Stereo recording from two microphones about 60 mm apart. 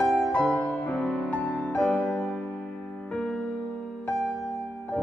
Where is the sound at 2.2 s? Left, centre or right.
Centre.